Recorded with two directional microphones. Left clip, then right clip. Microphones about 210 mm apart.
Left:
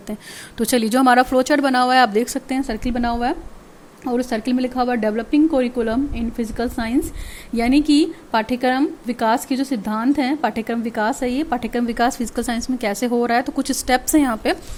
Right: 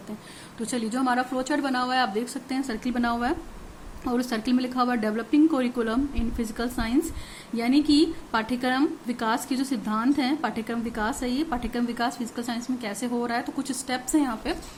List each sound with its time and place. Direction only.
0.6 s a woman's voice: 40° left (ahead or behind)